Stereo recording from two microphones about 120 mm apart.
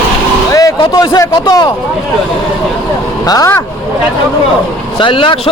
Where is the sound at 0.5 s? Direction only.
30° left (ahead or behind).